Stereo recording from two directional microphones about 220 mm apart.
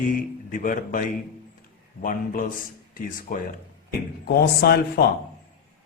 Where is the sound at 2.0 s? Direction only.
40° left (ahead or behind).